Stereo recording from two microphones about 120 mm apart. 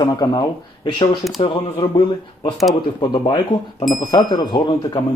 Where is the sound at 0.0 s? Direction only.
35° left (ahead or behind).